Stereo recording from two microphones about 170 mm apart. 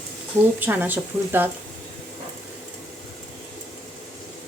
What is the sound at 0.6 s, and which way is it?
Speech, 10° right (ahead or behind).